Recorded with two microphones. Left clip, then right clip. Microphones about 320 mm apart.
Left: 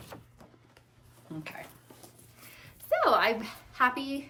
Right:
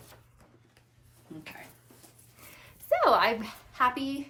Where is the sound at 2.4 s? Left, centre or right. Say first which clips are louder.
Even; centre.